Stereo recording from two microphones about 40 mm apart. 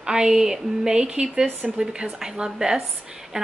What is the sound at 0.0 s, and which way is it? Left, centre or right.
A woman's voice, centre.